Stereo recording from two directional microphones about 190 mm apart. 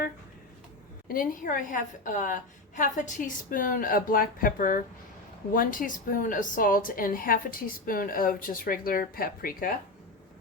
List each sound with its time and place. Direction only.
1.0 s a woman's voice: 50° left (ahead or behind)